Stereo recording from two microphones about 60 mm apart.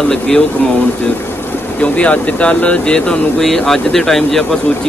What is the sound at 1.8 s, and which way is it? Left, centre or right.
A man's voice, left.